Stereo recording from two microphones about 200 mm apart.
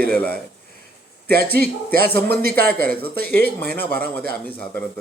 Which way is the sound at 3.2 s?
10° left (ahead or behind).